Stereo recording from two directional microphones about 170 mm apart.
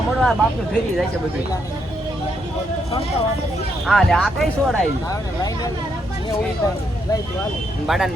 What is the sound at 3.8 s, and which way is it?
Speech, 5° left (ahead or behind).